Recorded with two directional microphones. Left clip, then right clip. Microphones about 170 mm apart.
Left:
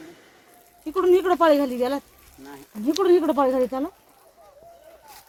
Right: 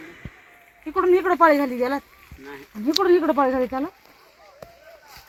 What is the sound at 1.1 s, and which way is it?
Speech, 30° right (ahead or behind).